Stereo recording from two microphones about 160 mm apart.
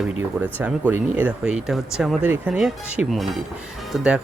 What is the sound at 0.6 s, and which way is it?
Speech, 10° right (ahead or behind).